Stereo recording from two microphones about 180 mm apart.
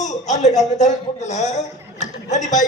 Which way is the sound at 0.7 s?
40° left (ahead or behind).